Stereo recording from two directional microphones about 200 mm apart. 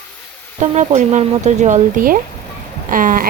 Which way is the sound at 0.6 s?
35° right (ahead or behind).